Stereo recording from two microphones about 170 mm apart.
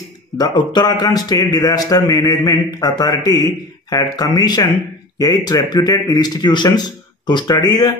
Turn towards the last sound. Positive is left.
turn(degrees=20)  # may be behind; listen again after turning